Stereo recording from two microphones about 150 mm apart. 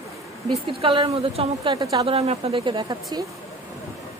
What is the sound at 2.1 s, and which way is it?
A woman's voice, 40° right (ahead or behind).